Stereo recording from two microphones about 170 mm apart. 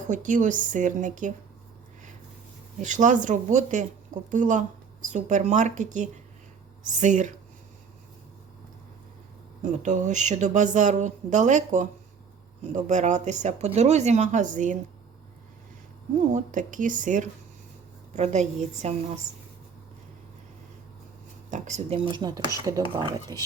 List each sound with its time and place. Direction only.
0.1 s speech: 50° right (ahead or behind)
2.8 s speech: 45° right (ahead or behind)
9.6 s speech: 45° right (ahead or behind)
16.1 s a woman's voice: 50° right (ahead or behind)
21.5 s speech: 45° right (ahead or behind); by 23.4 s 20° right (ahead or behind)